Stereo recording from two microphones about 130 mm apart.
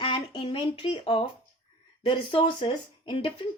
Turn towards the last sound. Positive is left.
turn(degrees=40)  # may be behind; listen again after turning